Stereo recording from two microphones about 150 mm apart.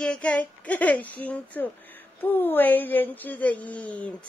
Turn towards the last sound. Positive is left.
turn(degrees=10)  # may be behind; listen again after turning